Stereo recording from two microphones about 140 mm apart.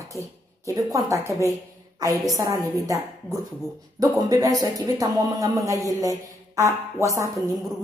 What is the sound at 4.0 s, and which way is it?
Speech, 25° right (ahead or behind).